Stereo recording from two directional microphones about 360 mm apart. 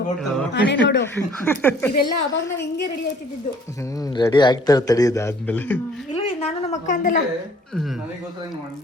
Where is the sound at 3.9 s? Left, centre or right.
Centre.